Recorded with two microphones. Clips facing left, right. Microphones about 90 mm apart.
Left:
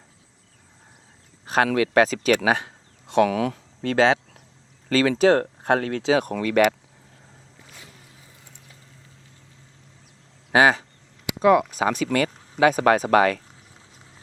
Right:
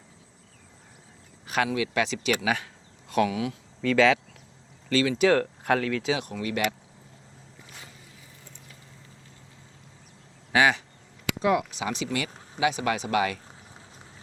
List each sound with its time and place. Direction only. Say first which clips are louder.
1.6 s speech: left 9 dB; 50° left (ahead or behind)
2.4 s a sound: left 6 dB; 35° left (ahead or behind)
3.2 s a sound: left 6 dB; 50° left (ahead or behind)
3.9 s speech: left 2 dB; 30° left (ahead or behind)
6.4 s speech: left 9 dB; 55° left (ahead or behind)
10.5 s speech: left 5 dB; 35° left (ahead or behind)
11.4 s speech: left 8 dB; 50° left (ahead or behind)